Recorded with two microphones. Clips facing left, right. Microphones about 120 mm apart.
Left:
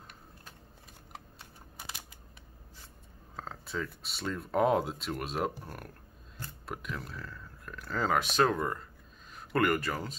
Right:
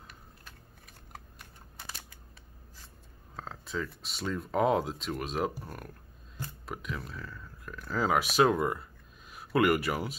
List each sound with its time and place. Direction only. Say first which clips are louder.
1.1 s typing: even; 15° left (ahead or behind)
3.3 s speech: right 1 dB; centre (ahead or behind)